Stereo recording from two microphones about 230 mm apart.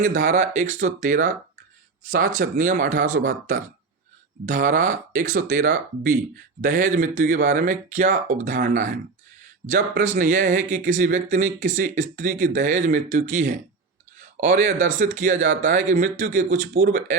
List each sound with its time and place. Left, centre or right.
0.0 s speech: right